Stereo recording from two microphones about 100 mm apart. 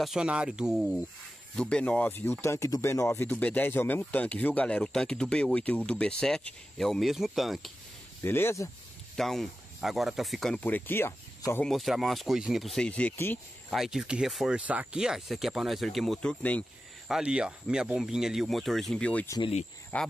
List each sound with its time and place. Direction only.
0.0 s speech: 5° right (ahead or behind)
1.5 s speech: 10° left (ahead or behind); by 3.3 s 30° left (ahead or behind)
3.3 s speech: 15° left (ahead or behind); by 7.7 s centre (ahead or behind)
8.2 s speech: 25° left (ahead or behind)
9.1 s speech: 5° left (ahead or behind)
10.6 s speech: 20° left (ahead or behind)
11.6 s speech: centre (ahead or behind); by 13.4 s 20° left (ahead or behind)
13.7 s speech: 5° right (ahead or behind); by 16.6 s 10° left (ahead or behind)
17.1 s speech: 10° right (ahead or behind); by 20.1 s 15° left (ahead or behind)